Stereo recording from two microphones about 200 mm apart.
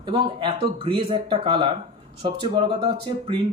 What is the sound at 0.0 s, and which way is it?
Speech, 25° right (ahead or behind).